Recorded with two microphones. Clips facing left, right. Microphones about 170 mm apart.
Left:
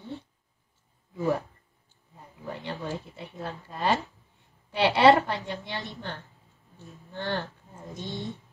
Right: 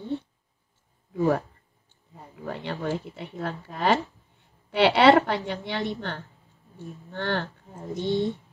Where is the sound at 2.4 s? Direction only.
65° right (ahead or behind).